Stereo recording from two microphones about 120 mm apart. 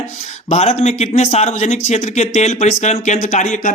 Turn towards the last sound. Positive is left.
turn(degrees=85)